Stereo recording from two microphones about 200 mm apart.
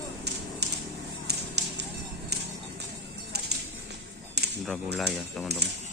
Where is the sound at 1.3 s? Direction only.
55° right (ahead or behind).